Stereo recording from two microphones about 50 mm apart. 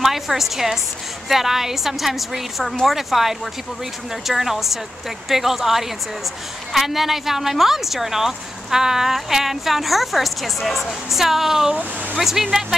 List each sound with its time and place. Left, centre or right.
0.0 s a woman's voice: centre
11.7 s speech: right
12.2 s a woman's voice: centre